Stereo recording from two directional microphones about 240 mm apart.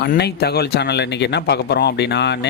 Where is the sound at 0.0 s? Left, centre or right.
Left.